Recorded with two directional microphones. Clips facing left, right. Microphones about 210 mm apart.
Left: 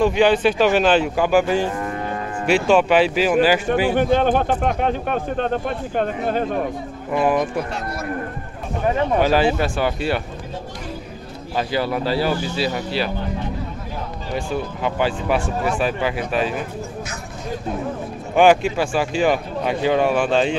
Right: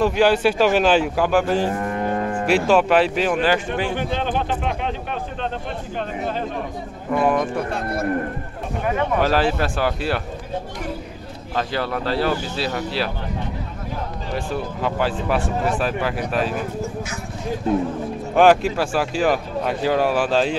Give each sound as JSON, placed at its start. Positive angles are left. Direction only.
{"t": 0.0, "sound": "speech", "side_deg": -5}
{"t": 2.0, "sound": "cattle", "side_deg": -45}
{"t": 2.4, "sound": "speech", "side_deg": 0}
{"t": 4.0, "sound": "speech", "side_deg": 50}
{"t": 7.1, "sound": "speech", "side_deg": 5}
{"t": 7.7, "sound": "speech", "side_deg": -55}
{"t": 9.2, "sound": "speech", "side_deg": 0}
{"t": 11.5, "sound": "speech", "side_deg": 5}
{"t": 14.3, "sound": "speech", "side_deg": 0}
{"t": 18.3, "sound": "speech", "side_deg": 0}